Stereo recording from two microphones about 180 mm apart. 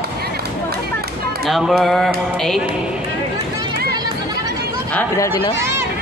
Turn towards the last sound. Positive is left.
turn(degrees=10)  # may be behind; listen again after turning